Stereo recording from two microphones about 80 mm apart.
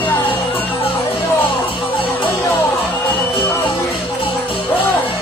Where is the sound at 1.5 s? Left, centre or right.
Left.